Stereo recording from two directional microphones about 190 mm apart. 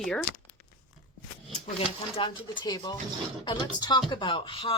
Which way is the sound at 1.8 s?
25° left (ahead or behind).